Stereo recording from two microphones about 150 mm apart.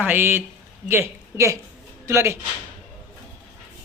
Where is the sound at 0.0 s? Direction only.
15° right (ahead or behind).